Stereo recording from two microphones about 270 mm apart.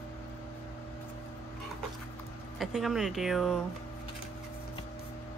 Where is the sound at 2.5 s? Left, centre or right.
Centre.